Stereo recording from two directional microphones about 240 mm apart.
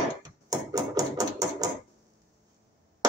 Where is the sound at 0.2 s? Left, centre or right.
Centre.